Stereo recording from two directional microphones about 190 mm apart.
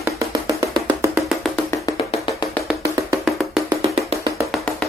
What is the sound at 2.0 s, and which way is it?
Music, 30° left (ahead or behind).